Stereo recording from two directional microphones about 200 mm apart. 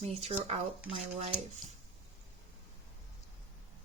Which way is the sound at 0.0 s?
30° right (ahead or behind).